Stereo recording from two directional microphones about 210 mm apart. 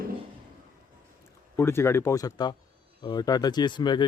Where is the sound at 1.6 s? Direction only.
10° left (ahead or behind).